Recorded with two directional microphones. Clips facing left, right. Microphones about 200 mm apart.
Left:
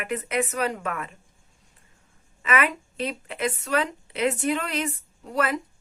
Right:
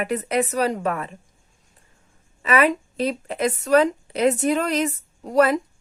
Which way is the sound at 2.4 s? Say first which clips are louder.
Right 6 dB; 35° right (ahead or behind).